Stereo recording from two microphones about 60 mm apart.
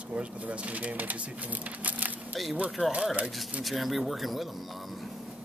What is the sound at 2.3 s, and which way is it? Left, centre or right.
Speech, centre.